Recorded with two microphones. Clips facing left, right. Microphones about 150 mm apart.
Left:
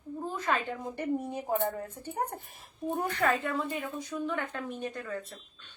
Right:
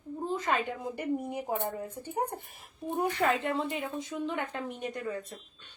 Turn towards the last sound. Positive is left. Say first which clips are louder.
# even
turn(degrees=-15)  # may be behind; listen again after turning